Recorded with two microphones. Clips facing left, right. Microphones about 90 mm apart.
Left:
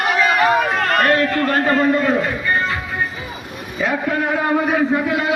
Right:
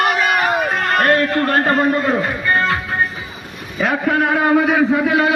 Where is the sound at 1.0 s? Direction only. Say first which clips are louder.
Right 2 dB; 40° right (ahead or behind).